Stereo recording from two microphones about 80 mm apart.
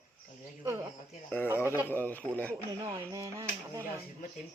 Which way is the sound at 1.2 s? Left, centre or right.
Left.